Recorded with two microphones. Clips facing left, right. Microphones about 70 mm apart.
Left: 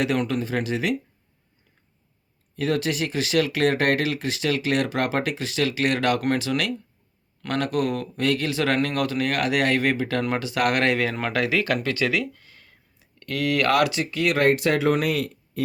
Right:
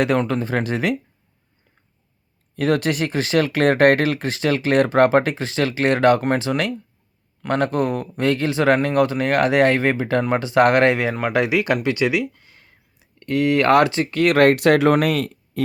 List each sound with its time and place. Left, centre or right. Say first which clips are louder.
0.0 s speech: right 4 dB; right
2.6 s speech: right 5 dB; right
14.1 s speech: right 7 dB; right